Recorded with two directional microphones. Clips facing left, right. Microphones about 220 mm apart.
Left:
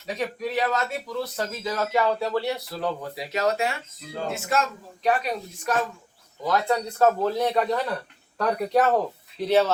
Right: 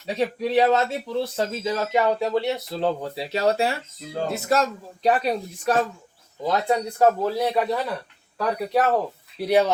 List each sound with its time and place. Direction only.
0.0 s speech: 30° right (ahead or behind)
6.4 s a man's voice: 20° right (ahead or behind); by 9.0 s 5° right (ahead or behind)
9.4 s a man's voice: 15° right (ahead or behind)